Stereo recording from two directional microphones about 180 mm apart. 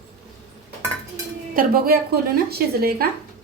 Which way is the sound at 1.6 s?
55° right (ahead or behind).